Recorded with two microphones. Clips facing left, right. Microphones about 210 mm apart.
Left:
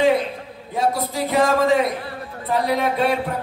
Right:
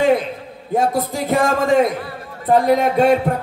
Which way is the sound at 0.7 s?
50° right (ahead or behind).